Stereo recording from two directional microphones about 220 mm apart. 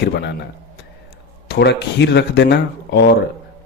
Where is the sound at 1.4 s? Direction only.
50° left (ahead or behind).